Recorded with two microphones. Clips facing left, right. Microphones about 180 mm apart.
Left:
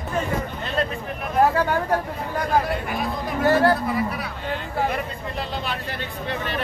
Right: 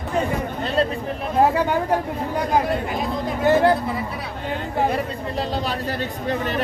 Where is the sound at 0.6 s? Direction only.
35° right (ahead or behind).